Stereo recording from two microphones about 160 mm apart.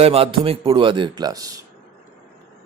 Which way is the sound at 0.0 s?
35° right (ahead or behind).